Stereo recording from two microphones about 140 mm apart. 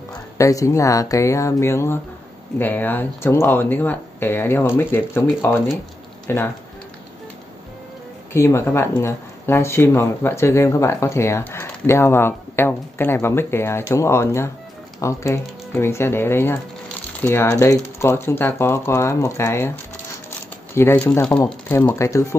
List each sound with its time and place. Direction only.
0.1 s speech: 25° left (ahead or behind)
8.3 s speech: 20° left (ahead or behind)
20.2 s crumpling: 15° left (ahead or behind)
21.5 s speech: 10° left (ahead or behind)